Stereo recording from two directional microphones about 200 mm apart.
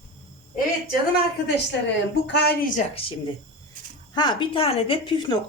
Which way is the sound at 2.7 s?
30° left (ahead or behind).